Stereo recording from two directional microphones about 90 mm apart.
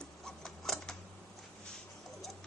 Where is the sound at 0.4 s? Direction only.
5° left (ahead or behind).